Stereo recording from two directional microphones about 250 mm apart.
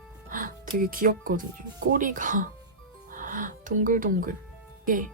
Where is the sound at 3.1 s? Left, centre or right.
Right.